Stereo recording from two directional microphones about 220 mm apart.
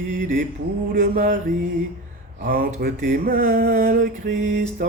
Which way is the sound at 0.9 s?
40° right (ahead or behind).